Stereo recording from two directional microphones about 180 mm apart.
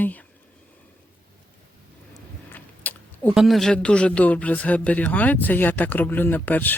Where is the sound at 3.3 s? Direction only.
Centre (ahead or behind).